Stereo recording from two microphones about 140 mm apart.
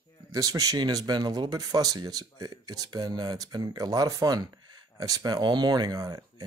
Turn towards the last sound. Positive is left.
turn(degrees=-25)  # may be behind; listen again after turning